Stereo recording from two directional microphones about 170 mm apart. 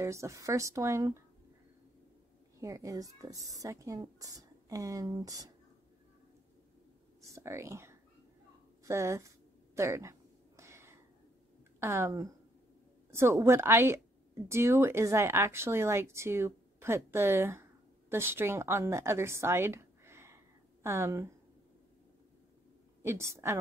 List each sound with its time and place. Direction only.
0.0 s speech: 15° right (ahead or behind)
2.6 s speech: 20° right (ahead or behind)
7.3 s speech: 15° right (ahead or behind)
9.8 s a sound: 15° right (ahead or behind)
11.8 s a woman's voice: 15° right (ahead or behind)
23.0 s speech: 15° right (ahead or behind)